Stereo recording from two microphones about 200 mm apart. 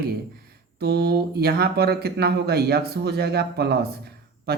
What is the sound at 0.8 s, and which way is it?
Speech, 55° right (ahead or behind).